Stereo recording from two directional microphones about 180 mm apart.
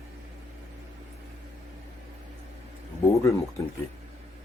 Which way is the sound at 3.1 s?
15° left (ahead or behind).